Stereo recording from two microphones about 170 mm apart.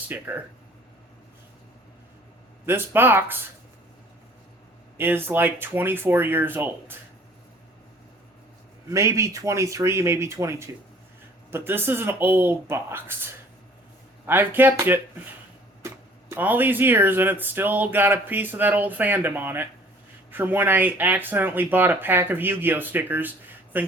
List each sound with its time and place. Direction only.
0.1 s speech: 10° right (ahead or behind)
2.6 s speech: 15° right (ahead or behind)
4.9 s speech: 10° right (ahead or behind)
8.9 s speech: 15° right (ahead or behind)
11.5 s speech: 15° right (ahead or behind)
14.3 s speech: 10° right (ahead or behind)
16.3 s speech: 10° right (ahead or behind)